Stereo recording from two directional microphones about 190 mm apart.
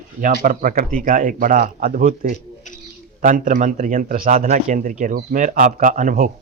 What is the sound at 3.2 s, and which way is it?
Speech, 45° right (ahead or behind).